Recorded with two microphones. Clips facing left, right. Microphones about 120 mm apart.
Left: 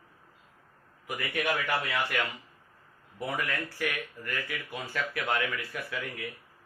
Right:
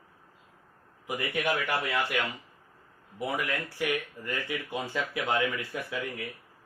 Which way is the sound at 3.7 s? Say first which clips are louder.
Right 3 dB; 20° right (ahead or behind).